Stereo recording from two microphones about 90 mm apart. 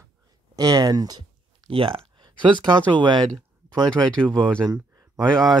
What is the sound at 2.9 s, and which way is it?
Speech, 60° right (ahead or behind).